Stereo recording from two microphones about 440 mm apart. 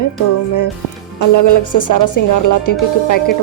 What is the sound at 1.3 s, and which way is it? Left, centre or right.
Speech, left.